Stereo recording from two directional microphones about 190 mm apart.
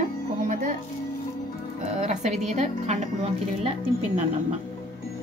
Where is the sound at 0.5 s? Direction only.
40° right (ahead or behind).